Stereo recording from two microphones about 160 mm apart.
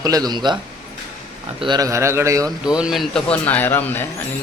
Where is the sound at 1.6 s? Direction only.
25° right (ahead or behind).